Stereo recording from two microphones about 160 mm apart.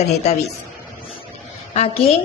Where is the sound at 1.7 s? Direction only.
40° left (ahead or behind).